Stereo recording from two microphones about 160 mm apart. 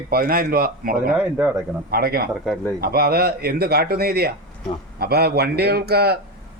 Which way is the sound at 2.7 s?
75° right (ahead or behind).